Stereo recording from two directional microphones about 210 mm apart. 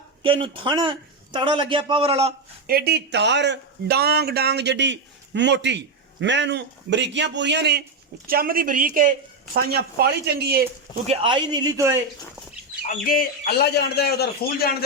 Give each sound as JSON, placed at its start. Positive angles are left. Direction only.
{"t": 0.2, "sound": "a man's voice", "side_deg": -25}
{"t": 2.6, "sound": "a man's voice", "side_deg": -45}
{"t": 11.0, "sound": "a man's voice", "side_deg": -30}
{"t": 13.1, "sound": "a man's voice", "side_deg": 45}